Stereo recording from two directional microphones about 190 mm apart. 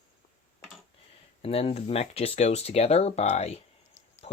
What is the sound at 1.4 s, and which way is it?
Speech, 30° left (ahead or behind).